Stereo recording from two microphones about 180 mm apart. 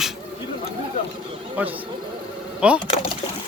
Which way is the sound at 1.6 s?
10° right (ahead or behind).